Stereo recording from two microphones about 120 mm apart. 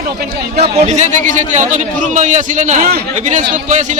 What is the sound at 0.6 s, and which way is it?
A man's voice, 70° right (ahead or behind).